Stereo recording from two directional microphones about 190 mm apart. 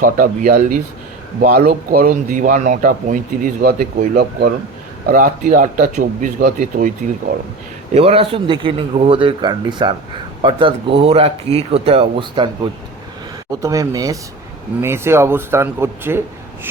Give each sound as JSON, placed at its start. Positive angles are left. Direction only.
{"t": 0.0, "sound": "speech", "side_deg": -45}
{"t": 7.9, "sound": "speech", "side_deg": -30}
{"t": 13.5, "sound": "speech", "side_deg": -20}